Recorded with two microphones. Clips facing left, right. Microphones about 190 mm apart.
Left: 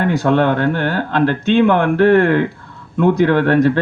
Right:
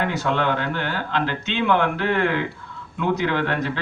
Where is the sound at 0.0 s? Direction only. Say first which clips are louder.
Left 8 dB; 50° left (ahead or behind).